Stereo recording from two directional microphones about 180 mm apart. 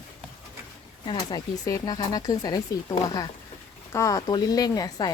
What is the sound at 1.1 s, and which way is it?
Speech, 20° left (ahead or behind).